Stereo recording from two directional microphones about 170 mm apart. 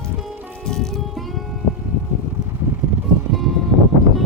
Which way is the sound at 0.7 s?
Centre (ahead or behind).